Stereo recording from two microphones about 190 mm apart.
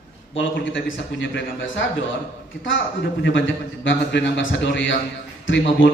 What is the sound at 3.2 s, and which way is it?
A man's voice, 80° left.